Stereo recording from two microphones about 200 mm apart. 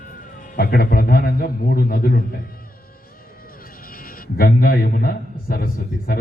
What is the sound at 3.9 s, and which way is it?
A man's voice, 45° left (ahead or behind).